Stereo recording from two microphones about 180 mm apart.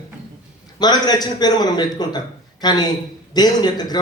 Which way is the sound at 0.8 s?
20° left (ahead or behind).